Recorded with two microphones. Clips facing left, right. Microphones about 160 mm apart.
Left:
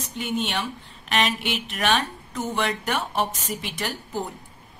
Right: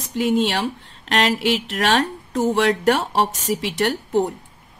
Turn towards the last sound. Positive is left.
turn(degrees=-75)  # may be behind; listen again after turning